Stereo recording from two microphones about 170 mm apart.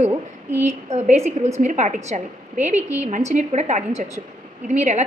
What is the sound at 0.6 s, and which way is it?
A woman's voice, 40° right (ahead or behind).